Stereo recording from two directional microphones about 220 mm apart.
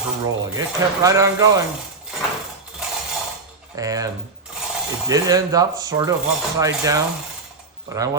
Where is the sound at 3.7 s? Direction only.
15° right (ahead or behind).